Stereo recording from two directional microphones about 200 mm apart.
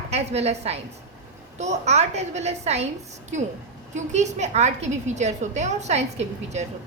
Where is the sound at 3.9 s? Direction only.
35° right (ahead or behind).